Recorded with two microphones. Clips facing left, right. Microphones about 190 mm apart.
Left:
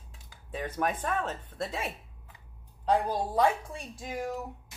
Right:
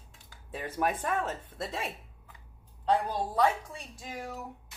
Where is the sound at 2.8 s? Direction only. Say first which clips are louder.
Left 1 dB; 10° left (ahead or behind).